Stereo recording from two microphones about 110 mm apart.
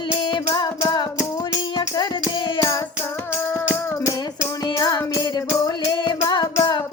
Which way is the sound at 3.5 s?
25° left (ahead or behind).